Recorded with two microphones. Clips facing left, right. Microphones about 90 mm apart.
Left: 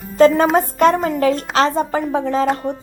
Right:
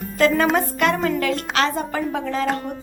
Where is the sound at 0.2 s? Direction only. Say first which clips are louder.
Left 6 dB; 35° left (ahead or behind).